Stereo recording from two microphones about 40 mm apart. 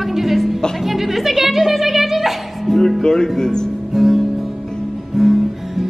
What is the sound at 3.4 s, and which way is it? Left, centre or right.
Speech, centre.